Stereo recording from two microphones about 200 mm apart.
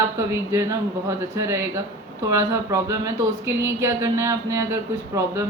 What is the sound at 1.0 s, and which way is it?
Speech, 15° right (ahead or behind).